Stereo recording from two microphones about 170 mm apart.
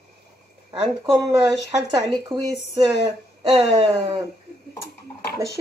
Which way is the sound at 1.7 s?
25° right (ahead or behind).